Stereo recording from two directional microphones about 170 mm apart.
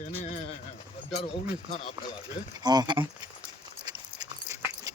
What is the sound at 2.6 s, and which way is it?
Speech, 25° right (ahead or behind).